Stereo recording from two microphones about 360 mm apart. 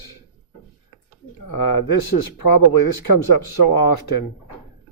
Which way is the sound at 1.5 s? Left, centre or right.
Left.